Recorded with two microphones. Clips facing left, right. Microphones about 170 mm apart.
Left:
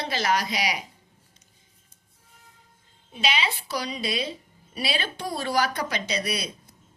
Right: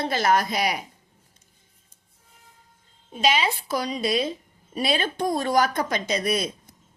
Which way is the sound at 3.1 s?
45° right (ahead or behind).